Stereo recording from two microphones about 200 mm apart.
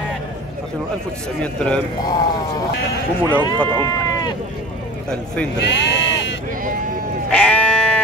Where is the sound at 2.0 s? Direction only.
20° left (ahead or behind).